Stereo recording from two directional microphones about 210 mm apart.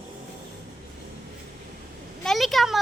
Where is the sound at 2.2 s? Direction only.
Centre (ahead or behind).